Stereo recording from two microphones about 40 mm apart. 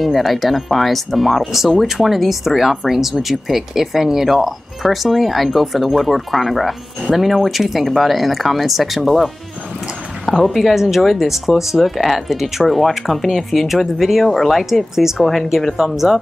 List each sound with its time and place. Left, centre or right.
0.0 s speech: centre
14.2 s speech: centre